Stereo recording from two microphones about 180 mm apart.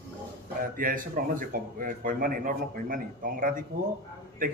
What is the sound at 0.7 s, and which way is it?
A man's voice, 50° right (ahead or behind).